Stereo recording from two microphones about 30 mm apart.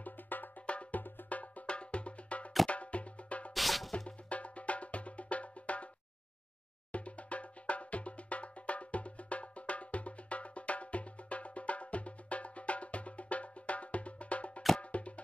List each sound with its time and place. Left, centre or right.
0.0 s music: left
0.9 s music: left
1.7 s music: left
3.5 s music: centre
4.3 s music: left
6.9 s music: left